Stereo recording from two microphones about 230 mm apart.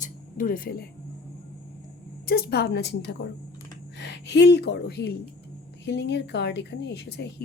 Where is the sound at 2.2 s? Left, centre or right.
Left.